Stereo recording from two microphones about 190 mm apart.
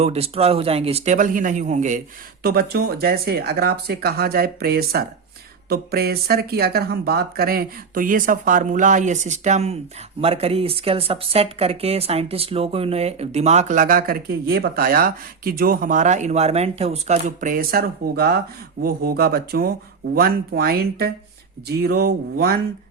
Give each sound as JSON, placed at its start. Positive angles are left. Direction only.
{"t": 0.0, "sound": "speech", "side_deg": -30}
{"t": 2.4, "sound": "speech", "side_deg": -55}